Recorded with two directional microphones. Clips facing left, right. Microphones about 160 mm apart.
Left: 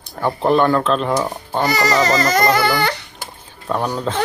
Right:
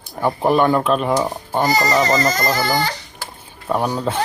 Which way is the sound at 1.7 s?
70° left (ahead or behind).